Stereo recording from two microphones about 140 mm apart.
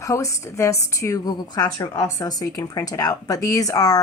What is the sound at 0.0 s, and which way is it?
A woman's voice, 20° left (ahead or behind).